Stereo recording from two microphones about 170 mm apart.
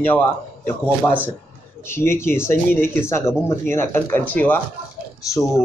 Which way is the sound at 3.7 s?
15° left (ahead or behind).